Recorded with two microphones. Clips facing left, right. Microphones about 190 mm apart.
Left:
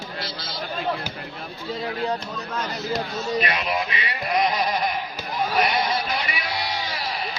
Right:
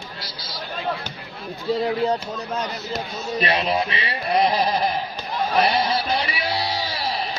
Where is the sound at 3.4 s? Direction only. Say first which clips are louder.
Right 4 dB; 30° right (ahead or behind).